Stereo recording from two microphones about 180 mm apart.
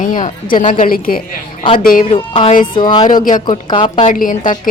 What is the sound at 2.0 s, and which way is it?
Speech, 30° left (ahead or behind).